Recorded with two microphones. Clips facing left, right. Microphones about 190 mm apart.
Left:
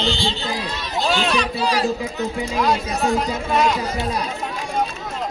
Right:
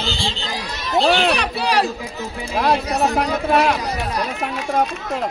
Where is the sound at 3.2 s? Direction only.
65° right (ahead or behind).